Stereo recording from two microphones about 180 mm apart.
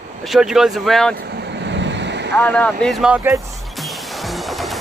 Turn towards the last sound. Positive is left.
turn(degrees=0)  # may be behind; listen again after turning